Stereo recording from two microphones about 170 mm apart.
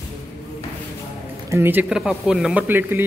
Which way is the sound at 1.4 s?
15° right (ahead or behind).